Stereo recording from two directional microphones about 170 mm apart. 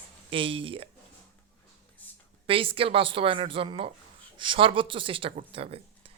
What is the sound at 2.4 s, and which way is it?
Speech, 30° right (ahead or behind).